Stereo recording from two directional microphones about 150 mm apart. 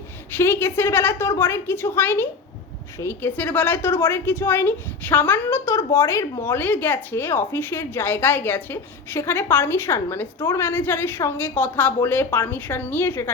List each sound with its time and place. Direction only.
0.3 s a woman's voice: 15° left (ahead or behind)